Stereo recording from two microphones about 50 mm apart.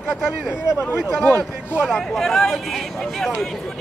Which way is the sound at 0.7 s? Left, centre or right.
Left.